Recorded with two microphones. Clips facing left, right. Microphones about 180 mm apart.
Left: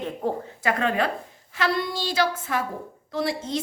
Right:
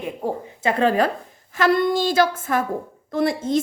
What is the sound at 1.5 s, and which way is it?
A woman's voice, 50° right (ahead or behind).